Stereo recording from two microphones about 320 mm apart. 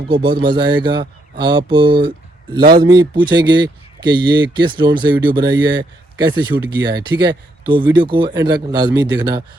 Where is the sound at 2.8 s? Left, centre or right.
Centre.